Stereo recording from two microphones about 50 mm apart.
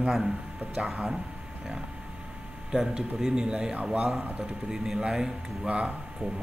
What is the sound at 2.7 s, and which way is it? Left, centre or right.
A man's voice, centre.